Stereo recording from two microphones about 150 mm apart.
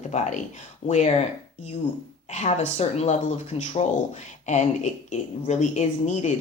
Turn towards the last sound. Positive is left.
turn(degrees=50)  # may be behind; listen again after turning